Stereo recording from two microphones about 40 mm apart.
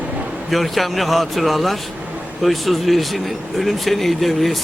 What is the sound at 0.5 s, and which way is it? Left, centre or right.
Speech, centre.